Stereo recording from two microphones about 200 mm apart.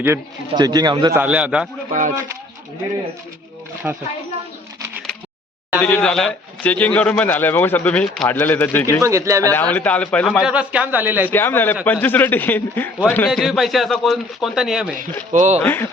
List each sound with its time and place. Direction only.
0.0 s a man's voice: 15° right (ahead or behind)
1.2 s a man's voice: 5° right (ahead or behind)
1.9 s speech: 40° right (ahead or behind)
3.9 s speech: 5° right (ahead or behind)
5.8 s a man's voice: 5° left (ahead or behind)
9.0 s speech: 15° right (ahead or behind)
9.5 s a man's voice: 10° left (ahead or behind); by 11.3 s 10° right (ahead or behind)
11.3 s a man's voice: 10° left (ahead or behind)
15.3 s speech: 35° right (ahead or behind)
15.6 s a man's voice: 10° left (ahead or behind)